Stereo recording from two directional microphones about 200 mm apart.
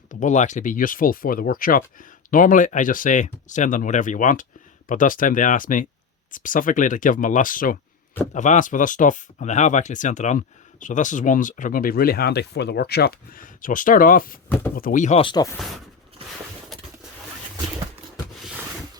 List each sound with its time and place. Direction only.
0.1 s speech: 40° left (ahead or behind)